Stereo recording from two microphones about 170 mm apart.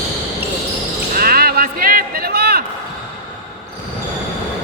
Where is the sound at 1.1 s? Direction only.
60° right (ahead or behind).